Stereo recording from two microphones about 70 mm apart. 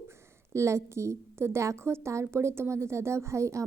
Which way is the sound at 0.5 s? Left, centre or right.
Right.